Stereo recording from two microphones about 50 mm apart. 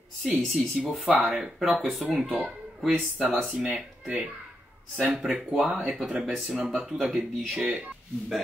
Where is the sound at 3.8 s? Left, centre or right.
Centre.